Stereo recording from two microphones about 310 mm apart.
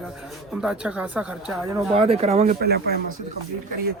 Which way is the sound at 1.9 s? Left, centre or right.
Centre.